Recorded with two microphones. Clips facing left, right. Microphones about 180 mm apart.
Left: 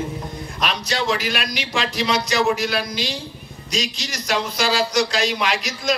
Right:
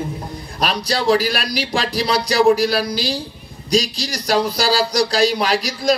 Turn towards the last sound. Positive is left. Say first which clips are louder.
# right 5 dB
turn(degrees=-35)  # may be behind; listen again after turning